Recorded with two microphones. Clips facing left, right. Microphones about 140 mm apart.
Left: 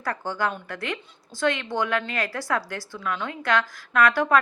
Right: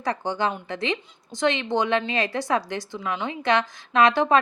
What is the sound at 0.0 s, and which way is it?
A woman's voice, 20° right (ahead or behind).